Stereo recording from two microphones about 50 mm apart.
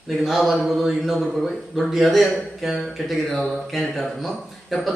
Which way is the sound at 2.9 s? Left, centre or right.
Centre.